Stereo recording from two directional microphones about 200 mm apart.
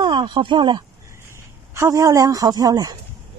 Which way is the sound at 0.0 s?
20° right (ahead or behind).